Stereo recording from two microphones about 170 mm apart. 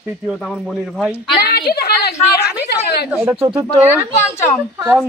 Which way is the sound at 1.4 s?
65° left (ahead or behind).